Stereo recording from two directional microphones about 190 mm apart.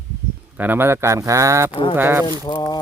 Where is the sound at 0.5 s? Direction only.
10° right (ahead or behind).